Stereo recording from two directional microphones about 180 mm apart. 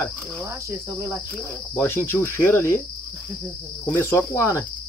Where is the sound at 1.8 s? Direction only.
15° left (ahead or behind).